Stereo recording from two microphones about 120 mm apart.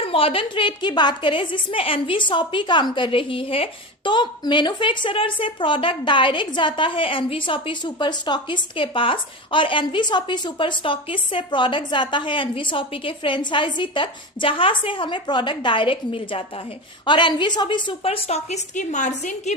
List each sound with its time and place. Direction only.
0.0 s a woman's voice: 50° left (ahead or behind); by 19.5 s 85° left